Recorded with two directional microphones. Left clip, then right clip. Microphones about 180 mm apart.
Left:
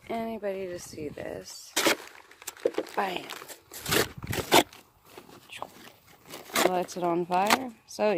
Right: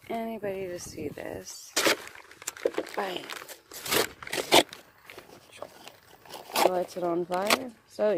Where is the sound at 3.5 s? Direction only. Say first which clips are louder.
Even; 20° left (ahead or behind).